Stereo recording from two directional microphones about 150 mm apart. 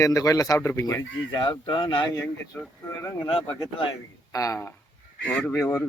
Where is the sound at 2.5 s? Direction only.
15° left (ahead or behind).